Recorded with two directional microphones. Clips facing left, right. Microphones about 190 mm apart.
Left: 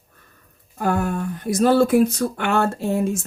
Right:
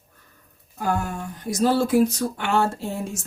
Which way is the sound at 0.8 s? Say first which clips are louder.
Left 4 dB; 55° left (ahead or behind).